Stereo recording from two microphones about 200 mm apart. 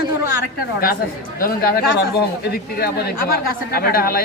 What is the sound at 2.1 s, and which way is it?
Speech, 50° left (ahead or behind).